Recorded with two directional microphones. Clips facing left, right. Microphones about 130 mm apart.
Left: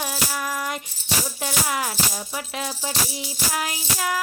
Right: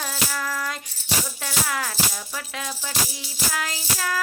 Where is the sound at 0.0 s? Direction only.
15° left (ahead or behind).